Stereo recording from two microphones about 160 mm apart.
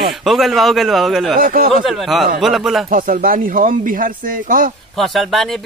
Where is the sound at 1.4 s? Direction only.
65° right (ahead or behind).